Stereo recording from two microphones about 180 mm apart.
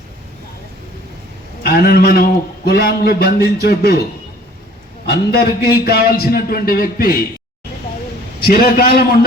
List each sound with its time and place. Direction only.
1.6 s a man's voice: 60° left (ahead or behind)
5.0 s a man's voice: 60° left (ahead or behind)
8.4 s a man's voice: 55° left (ahead or behind)